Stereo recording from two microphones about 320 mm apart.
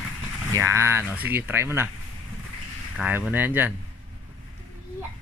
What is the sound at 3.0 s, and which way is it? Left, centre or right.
Speech, centre.